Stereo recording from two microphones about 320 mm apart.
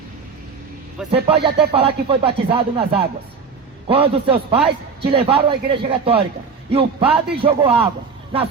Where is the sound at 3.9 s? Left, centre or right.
Centre.